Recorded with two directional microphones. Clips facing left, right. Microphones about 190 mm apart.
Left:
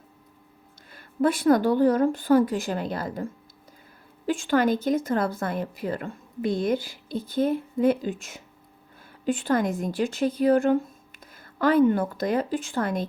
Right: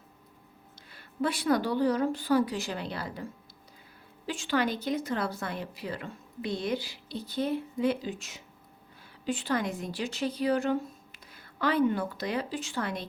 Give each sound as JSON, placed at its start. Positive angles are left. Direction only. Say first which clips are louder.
{"t": 0.9, "sound": "speech", "louder": "left 7 dB", "side_deg": 50}
{"t": 4.3, "sound": "a woman's voice", "louder": "left 7 dB", "side_deg": 50}